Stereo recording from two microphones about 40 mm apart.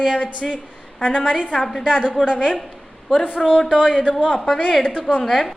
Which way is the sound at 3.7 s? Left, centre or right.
Centre.